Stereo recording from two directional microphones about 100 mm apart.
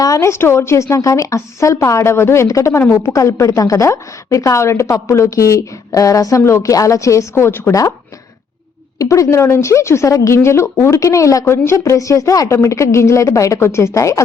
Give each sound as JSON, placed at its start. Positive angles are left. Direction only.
{"t": 0.0, "sound": "a woman's voice", "side_deg": 30}
{"t": 9.0, "sound": "a woman's voice", "side_deg": 30}